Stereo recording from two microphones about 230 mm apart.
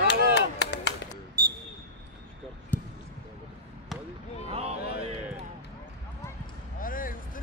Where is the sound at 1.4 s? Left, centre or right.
Right.